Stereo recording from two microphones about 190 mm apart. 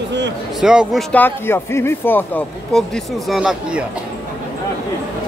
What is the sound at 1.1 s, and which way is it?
Speech, 10° left (ahead or behind).